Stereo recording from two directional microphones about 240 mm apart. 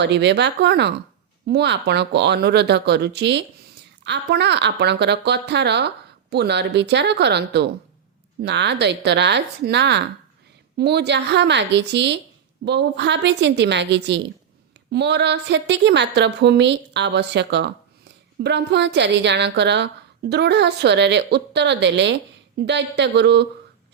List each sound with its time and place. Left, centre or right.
0.0 s a woman's voice: right